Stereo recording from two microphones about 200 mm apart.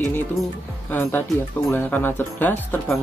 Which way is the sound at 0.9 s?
10° left (ahead or behind).